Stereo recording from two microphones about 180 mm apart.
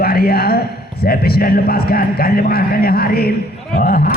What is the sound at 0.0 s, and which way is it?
A man's voice, 60° left (ahead or behind).